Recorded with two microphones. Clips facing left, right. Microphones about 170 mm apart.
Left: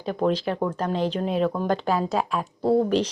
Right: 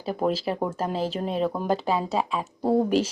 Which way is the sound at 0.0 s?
5° right (ahead or behind).